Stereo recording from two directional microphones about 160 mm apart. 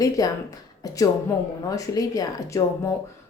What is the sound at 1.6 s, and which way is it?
Speech, 20° left (ahead or behind).